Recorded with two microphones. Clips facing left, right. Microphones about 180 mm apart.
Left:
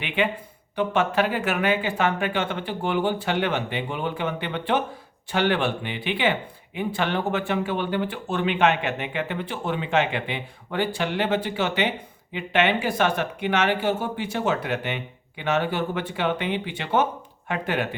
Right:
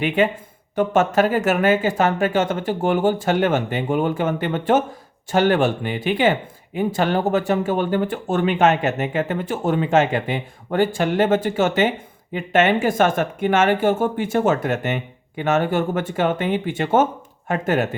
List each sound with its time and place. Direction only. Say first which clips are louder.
0.2 s speech: right 6 dB; 40° right (ahead or behind)